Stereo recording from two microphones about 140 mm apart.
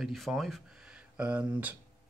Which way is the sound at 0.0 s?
Centre (ahead or behind).